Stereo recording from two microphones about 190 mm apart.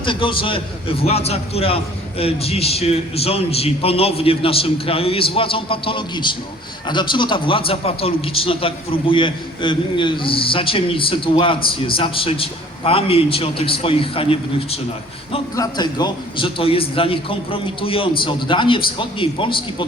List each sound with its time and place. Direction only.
0.0 s a man's voice: 25° left (ahead or behind)